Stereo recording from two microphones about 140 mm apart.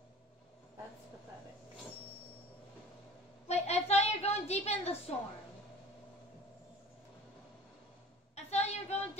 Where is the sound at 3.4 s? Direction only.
50° left (ahead or behind).